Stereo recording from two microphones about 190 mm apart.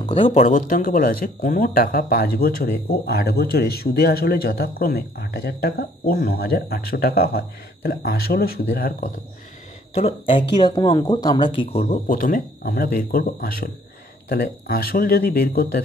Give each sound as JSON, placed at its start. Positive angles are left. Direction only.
{"t": 0.1, "sound": "speech", "side_deg": 35}
{"t": 9.9, "sound": "speech", "side_deg": 30}